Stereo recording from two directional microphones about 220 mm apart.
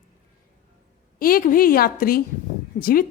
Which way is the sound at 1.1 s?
40° left (ahead or behind).